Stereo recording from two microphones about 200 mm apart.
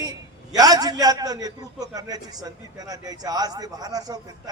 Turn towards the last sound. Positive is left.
turn(degrees=-20)  # may be behind; listen again after turning